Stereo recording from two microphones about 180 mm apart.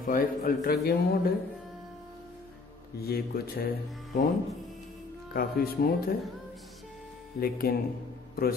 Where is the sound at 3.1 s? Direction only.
55° left (ahead or behind).